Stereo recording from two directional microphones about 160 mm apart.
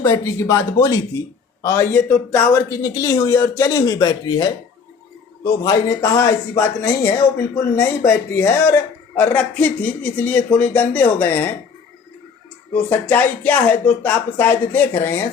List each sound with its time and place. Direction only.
0.0 s a man's voice: 20° left (ahead or behind)
12.7 s a man's voice: 10° left (ahead or behind)